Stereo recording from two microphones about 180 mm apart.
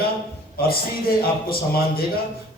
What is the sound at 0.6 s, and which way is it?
A man's voice, 55° left (ahead or behind).